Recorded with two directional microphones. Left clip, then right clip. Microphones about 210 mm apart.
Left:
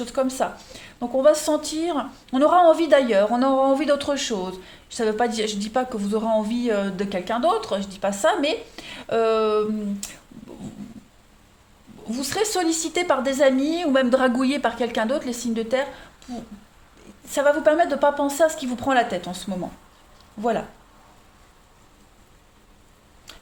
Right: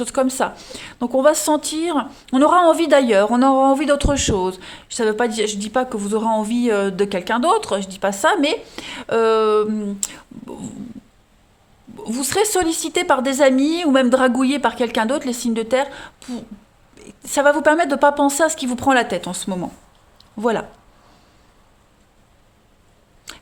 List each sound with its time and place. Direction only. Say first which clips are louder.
0.0 s speech: right 4 dB; 40° right (ahead or behind)
12.0 s speech: right 5 dB; 40° right (ahead or behind)